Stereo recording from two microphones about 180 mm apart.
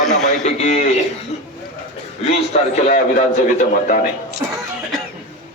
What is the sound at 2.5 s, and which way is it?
A man's voice, 35° left (ahead or behind).